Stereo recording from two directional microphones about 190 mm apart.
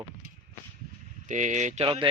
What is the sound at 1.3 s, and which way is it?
Speech, 40° right (ahead or behind).